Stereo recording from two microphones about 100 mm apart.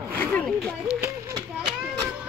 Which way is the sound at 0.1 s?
15° left (ahead or behind).